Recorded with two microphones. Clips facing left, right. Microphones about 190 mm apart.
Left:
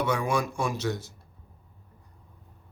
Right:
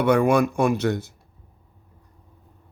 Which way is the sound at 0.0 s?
60° right (ahead or behind).